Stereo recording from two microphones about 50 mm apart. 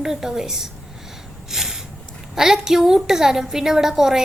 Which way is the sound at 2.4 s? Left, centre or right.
Centre.